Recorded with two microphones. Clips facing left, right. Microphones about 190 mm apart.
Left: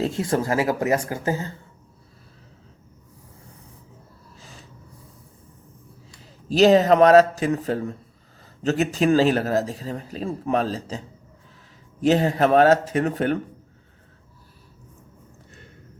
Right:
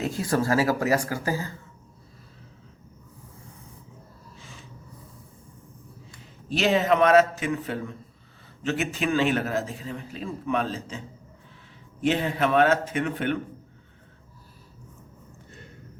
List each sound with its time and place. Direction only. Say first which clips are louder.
0.0 s speech: left 2 dB; 25° left (ahead or behind)
4.4 s a sound: left 1 dB; 40° left (ahead or behind)
6.5 s a man's voice: left 7 dB; 40° left (ahead or behind)